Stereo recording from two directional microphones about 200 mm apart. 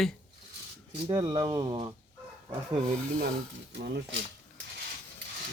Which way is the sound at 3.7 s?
60° right (ahead or behind).